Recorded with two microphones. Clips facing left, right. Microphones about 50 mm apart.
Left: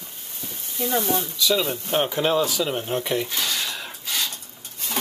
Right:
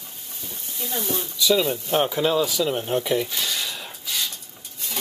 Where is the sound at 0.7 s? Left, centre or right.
Left.